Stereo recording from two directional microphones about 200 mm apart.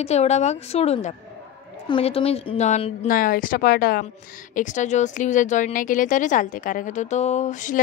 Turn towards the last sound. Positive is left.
turn(degrees=40)  # may be behind; listen again after turning